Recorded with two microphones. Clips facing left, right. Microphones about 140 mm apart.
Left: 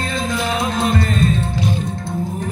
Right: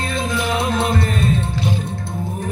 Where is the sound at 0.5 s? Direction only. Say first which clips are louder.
Even; 25° right (ahead or behind).